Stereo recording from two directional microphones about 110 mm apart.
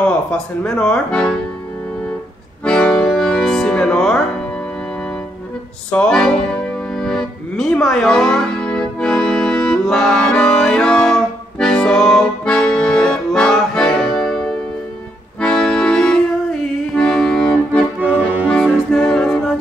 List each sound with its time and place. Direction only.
0.0 s speech: 10° left (ahead or behind)
2.6 s accordion: 10° left (ahead or behind)
5.9 s accordion: 10° left (ahead or behind)
18.0 s music: 15° right (ahead or behind)
18.5 s music: 10° left (ahead or behind)